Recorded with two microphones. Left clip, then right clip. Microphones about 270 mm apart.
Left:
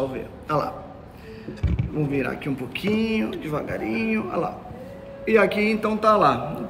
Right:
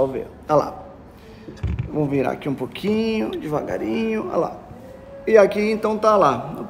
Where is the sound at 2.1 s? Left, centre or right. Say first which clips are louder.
Right 3 dB; right.